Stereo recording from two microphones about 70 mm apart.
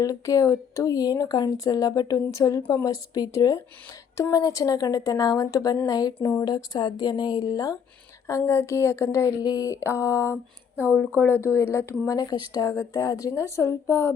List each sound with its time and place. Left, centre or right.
0.0 s speech: left
6.4 s speech: left
8.3 s speech: left
9.4 s speech: left
11.2 s speech: left
12.0 s speech: left
12.6 s speech: left